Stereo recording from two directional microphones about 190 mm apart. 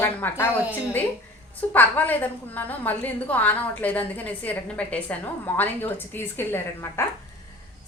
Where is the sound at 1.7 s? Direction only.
10° left (ahead or behind).